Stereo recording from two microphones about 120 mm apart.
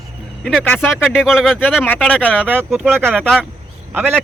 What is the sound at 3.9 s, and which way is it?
Speech, 15° right (ahead or behind).